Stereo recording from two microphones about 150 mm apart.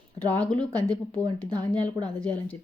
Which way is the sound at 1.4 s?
25° right (ahead or behind).